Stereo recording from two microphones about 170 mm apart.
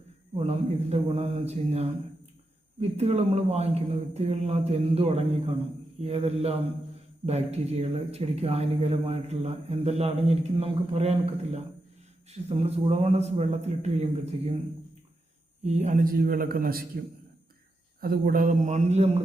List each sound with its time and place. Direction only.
0.3 s speech: 35° right (ahead or behind)
3.0 s speech: 40° right (ahead or behind)
15.6 s a man's voice: 40° right (ahead or behind); by 16.8 s 60° right (ahead or behind)
18.0 s speech: 60° right (ahead or behind); by 19.2 s 40° right (ahead or behind)